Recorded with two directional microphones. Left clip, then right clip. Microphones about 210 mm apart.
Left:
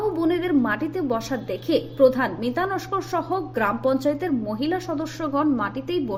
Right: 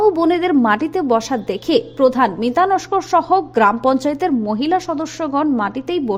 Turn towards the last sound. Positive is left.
turn(degrees=-45)  # may be behind; listen again after turning